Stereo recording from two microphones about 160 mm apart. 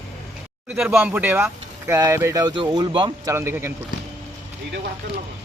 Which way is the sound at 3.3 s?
15° right (ahead or behind).